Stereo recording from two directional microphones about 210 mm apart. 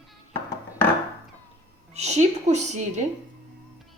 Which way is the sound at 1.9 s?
30° right (ahead or behind).